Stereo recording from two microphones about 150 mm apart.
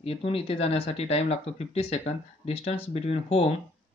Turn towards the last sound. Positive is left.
turn(degrees=40)  # may be behind; listen again after turning